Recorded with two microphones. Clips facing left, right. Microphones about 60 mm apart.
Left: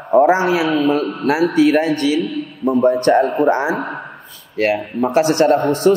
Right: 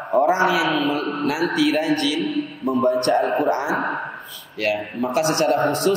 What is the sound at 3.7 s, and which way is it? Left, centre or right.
Speech, centre.